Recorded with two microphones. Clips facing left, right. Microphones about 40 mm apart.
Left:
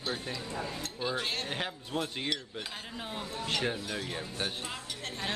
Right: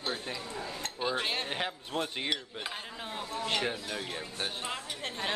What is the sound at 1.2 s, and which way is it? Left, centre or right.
Speech, right.